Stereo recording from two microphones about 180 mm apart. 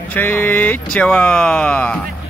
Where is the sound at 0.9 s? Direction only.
5° left (ahead or behind).